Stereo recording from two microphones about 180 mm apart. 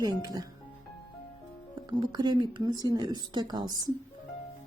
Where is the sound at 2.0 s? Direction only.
25° right (ahead or behind).